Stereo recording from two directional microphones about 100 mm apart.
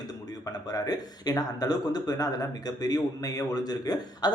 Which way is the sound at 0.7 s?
40° left (ahead or behind).